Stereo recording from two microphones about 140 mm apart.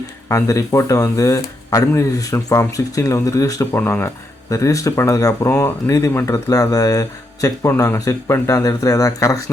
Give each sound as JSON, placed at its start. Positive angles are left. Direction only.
{"t": 0.3, "sound": "speech", "side_deg": 20}